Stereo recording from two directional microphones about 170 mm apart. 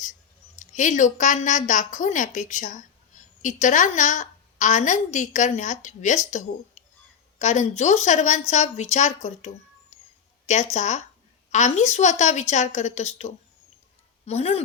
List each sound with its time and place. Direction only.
0.6 s a woman's voice: 45° left (ahead or behind)
6.8 s a sound: 40° left (ahead or behind)
7.3 s a woman's voice: 45° left (ahead or behind)